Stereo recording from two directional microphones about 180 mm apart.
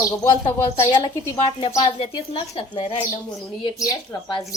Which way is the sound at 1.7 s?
25° left (ahead or behind).